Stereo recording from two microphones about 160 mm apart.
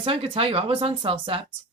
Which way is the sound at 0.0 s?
35° right (ahead or behind).